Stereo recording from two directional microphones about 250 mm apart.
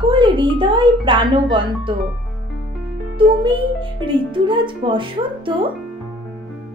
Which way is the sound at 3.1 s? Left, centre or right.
Right.